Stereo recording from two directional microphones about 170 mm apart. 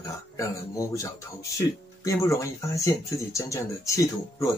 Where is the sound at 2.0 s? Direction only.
15° left (ahead or behind).